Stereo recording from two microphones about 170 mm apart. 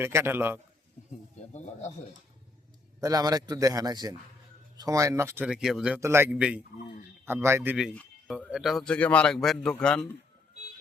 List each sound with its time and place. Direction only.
0.0 s speech: 15° right (ahead or behind)
3.0 s a man's voice: 20° right (ahead or behind)
5.5 s a man's voice: 5° right (ahead or behind)
6.0 s a man's voice: 15° right (ahead or behind); by 10.0 s 5° left (ahead or behind)